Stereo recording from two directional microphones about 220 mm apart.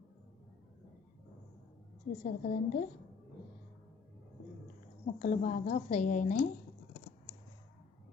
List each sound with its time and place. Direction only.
2.2 s a woman's voice: 35° left (ahead or behind)
5.2 s a woman's voice: 35° left (ahead or behind)